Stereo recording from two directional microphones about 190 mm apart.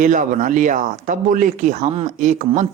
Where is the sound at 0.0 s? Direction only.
45° right (ahead or behind).